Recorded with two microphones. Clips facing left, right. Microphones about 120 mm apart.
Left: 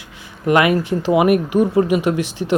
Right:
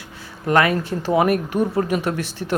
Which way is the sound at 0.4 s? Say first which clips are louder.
Left 3 dB; 10° left (ahead or behind).